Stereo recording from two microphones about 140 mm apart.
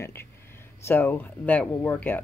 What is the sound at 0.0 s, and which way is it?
Speech, 15° left (ahead or behind).